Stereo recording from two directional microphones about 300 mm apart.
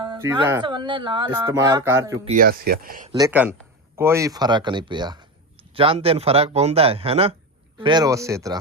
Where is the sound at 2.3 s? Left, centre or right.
Right.